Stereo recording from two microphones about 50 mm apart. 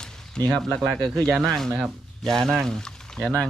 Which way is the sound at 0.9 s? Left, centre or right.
Centre.